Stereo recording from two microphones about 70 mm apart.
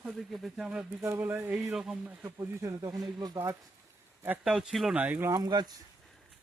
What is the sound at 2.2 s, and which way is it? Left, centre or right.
Speech, right.